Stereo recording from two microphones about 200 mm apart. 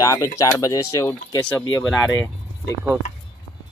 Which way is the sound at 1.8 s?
Centre (ahead or behind).